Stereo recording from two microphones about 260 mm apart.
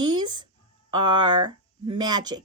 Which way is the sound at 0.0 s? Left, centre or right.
Centre.